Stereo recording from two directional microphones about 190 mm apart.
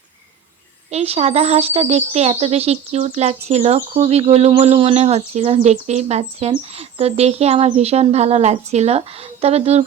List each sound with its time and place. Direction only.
0.9 s speech: 30° right (ahead or behind)